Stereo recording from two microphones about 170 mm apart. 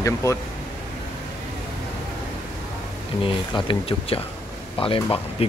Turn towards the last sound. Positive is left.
turn(degrees=30)  # may be behind; listen again after turning